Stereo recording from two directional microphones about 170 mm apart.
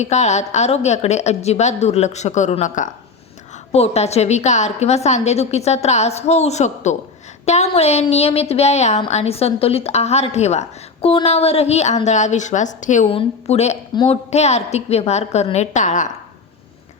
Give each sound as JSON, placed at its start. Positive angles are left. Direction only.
{"t": 0.0, "sound": "a woman's voice", "side_deg": 40}
{"t": 13.1, "sound": "a woman's voice", "side_deg": 35}
{"t": 13.9, "sound": "a woman's voice", "side_deg": 25}
{"t": 14.3, "sound": "a woman's voice", "side_deg": 40}